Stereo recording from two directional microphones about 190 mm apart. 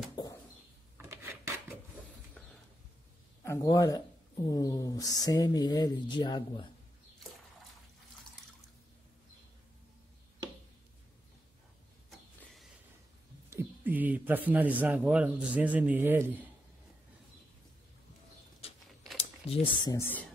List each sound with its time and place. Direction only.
0.1 s a sound: 20° left (ahead or behind)
0.9 s rub: 15° right (ahead or behind)
2.4 s a sound: 5° left (ahead or behind)
3.4 s speech: 20° left (ahead or behind)
13.5 s speech: 10° right (ahead or behind)
19.1 s speech: 30° left (ahead or behind)